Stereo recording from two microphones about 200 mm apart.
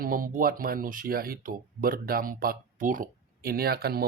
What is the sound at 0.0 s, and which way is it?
Speech, 45° right (ahead or behind).